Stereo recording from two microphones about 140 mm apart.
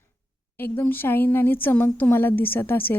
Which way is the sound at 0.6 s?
15° left (ahead or behind).